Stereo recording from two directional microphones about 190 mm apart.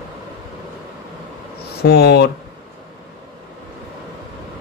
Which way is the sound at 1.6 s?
55° left (ahead or behind).